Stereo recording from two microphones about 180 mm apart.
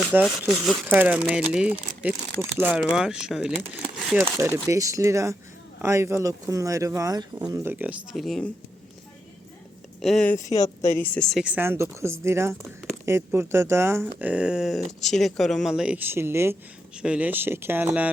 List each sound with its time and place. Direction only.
0.0 s speech: 10° right (ahead or behind)
10.0 s speech: 5° left (ahead or behind)
10.3 s speech: 20° left (ahead or behind); by 18.1 s 10° right (ahead or behind)